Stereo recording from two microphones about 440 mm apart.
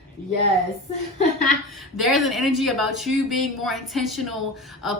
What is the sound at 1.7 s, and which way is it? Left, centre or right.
Speech, centre.